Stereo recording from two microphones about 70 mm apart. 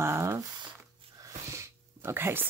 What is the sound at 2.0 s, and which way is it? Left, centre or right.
Speech, right.